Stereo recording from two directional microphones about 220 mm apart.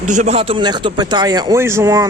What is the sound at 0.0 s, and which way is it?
A man's voice, 35° right (ahead or behind).